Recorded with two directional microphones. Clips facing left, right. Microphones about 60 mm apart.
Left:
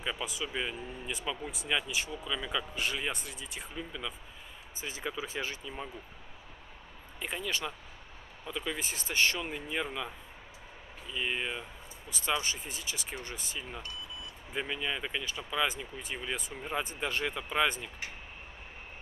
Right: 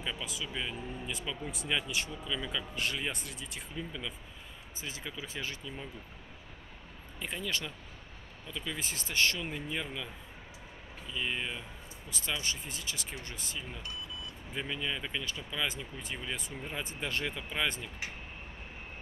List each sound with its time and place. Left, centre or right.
0.0 s speech: centre
4.8 s speech: left
7.2 s speech: centre
11.1 s speech: centre